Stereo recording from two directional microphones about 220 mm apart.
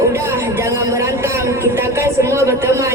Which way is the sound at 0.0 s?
10° right (ahead or behind).